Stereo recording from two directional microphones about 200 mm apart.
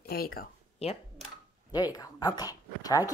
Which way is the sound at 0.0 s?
50° left (ahead or behind).